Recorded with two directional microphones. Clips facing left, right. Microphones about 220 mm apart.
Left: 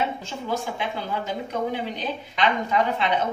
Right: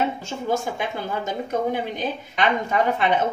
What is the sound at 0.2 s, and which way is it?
A woman's voice, 45° right (ahead or behind).